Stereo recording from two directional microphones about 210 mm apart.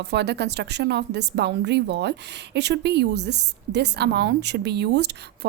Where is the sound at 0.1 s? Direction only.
55° right (ahead or behind).